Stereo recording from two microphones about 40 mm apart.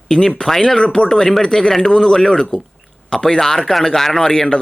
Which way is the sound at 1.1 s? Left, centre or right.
Centre.